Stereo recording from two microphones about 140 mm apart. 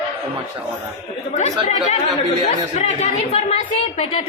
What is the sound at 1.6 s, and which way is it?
A woman's voice, 55° left (ahead or behind).